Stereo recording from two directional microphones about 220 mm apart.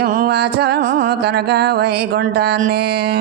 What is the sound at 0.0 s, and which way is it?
Mantra, 40° right (ahead or behind).